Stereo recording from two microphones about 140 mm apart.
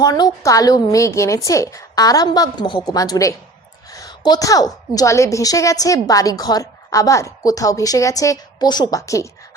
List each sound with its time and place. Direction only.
0.0 s a woman's voice: 25° left (ahead or behind)
3.9 s a sound: 25° left (ahead or behind)
4.9 s a woman's voice: 20° left (ahead or behind)